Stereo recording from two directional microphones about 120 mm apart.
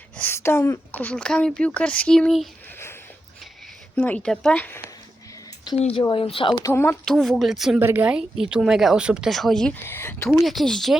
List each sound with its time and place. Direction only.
0.2 s speech: 20° left (ahead or behind); by 2.5 s centre (ahead or behind)
3.9 s speech: 10° left (ahead or behind)
5.7 s speech: 55° left (ahead or behind)
6.0 s speech: 40° left (ahead or behind)
6.7 s speech: 20° left (ahead or behind)
7.0 s speech: 5° left (ahead or behind)
7.8 s speech: 15° right (ahead or behind); by 9.7 s 5° left (ahead or behind)
9.7 s speech: 20° left (ahead or behind)
10.2 s speech: centre (ahead or behind)